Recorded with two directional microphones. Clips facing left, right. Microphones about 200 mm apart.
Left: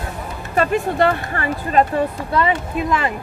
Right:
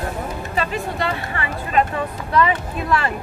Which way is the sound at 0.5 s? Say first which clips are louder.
Left 8 dB; 55° left (ahead or behind).